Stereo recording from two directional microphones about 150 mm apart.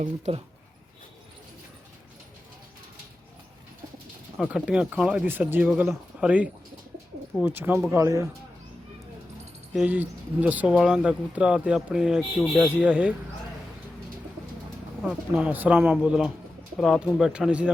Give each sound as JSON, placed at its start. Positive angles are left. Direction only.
{"t": 4.4, "sound": "speech", "side_deg": -5}
{"t": 9.7, "sound": "speech", "side_deg": -10}
{"t": 15.0, "sound": "speech", "side_deg": -10}